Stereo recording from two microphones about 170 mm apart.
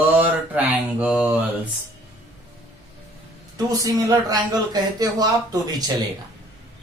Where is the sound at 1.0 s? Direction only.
10° right (ahead or behind).